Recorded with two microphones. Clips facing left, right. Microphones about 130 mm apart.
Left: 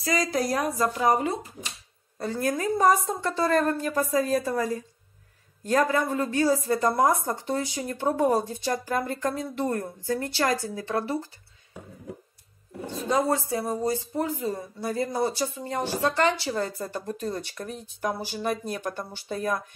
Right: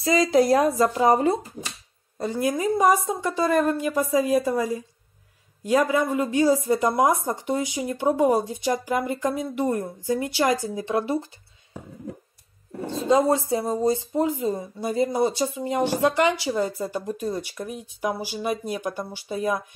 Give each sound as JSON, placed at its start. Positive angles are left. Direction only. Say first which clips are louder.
{"t": 0.0, "sound": "speech", "louder": "right 7 dB", "side_deg": -25}
{"t": 2.1, "sound": "speech", "louder": "right 3 dB", "side_deg": -15}
{"t": 12.9, "sound": "speech", "louder": "right 5 dB", "side_deg": -25}